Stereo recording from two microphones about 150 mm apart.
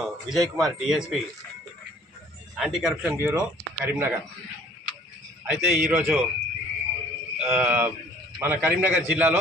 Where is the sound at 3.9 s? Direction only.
15° right (ahead or behind).